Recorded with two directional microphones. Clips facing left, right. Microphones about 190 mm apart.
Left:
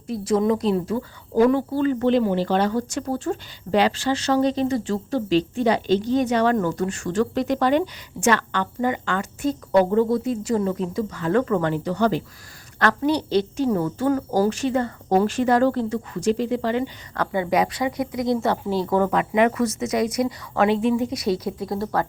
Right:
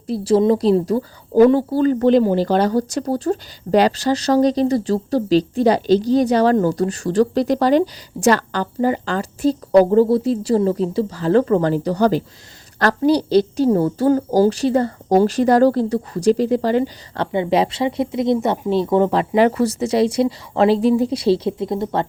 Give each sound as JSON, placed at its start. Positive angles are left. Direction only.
{"t": 0.1, "sound": "speech", "side_deg": -30}
{"t": 17.3, "sound": "speech", "side_deg": -25}